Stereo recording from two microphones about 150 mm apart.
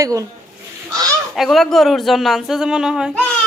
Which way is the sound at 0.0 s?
20° right (ahead or behind).